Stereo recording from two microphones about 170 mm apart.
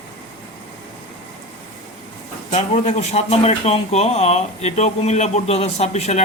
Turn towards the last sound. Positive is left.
turn(degrees=40)  # may be behind; listen again after turning